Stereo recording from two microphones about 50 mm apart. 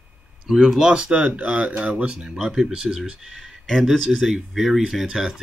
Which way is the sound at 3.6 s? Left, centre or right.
Centre.